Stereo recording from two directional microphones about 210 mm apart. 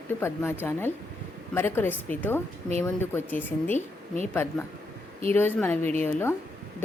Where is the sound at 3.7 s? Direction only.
35° left (ahead or behind).